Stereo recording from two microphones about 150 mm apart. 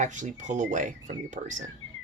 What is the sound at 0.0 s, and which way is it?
Speech, 55° right (ahead or behind).